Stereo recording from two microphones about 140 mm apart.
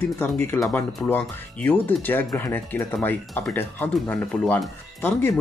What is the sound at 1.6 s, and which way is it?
Speech, 15° left (ahead or behind).